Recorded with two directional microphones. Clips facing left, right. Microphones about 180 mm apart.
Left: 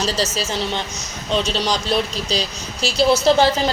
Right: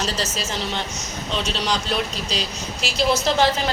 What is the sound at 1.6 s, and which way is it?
A woman's voice, 35° left (ahead or behind).